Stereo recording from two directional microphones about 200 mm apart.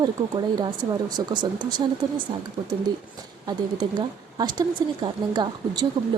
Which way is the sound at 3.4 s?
20° right (ahead or behind).